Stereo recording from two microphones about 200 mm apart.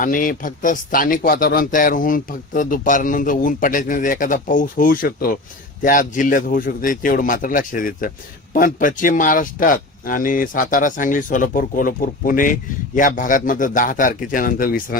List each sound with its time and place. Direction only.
0.0 s speech: 40° left (ahead or behind)